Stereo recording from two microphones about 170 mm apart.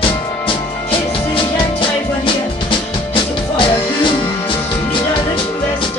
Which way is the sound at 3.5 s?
30° left (ahead or behind).